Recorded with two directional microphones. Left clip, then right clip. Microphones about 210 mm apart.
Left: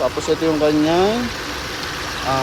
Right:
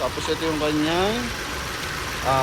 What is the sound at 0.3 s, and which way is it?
Speech, 30° left (ahead or behind).